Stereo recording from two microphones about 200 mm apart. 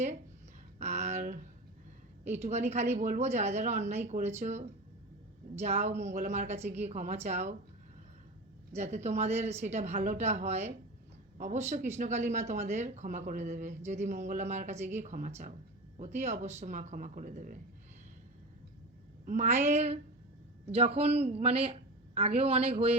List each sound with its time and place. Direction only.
0.8 s speech: 35° right (ahead or behind)
8.7 s speech: 35° right (ahead or behind)
19.2 s speech: 40° right (ahead or behind)